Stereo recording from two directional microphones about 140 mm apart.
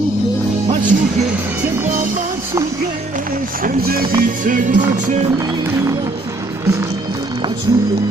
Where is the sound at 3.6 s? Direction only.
90° right.